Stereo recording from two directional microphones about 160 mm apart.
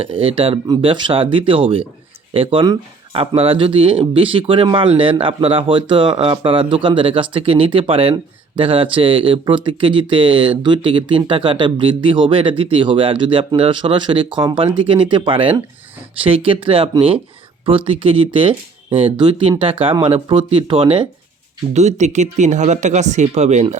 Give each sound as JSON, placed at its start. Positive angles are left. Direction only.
{"t": 0.0, "sound": "speech", "side_deg": -35}
{"t": 21.7, "sound": "speech", "side_deg": -45}